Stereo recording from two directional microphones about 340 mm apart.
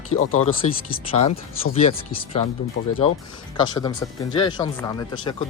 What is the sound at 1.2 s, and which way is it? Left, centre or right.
Speech, centre.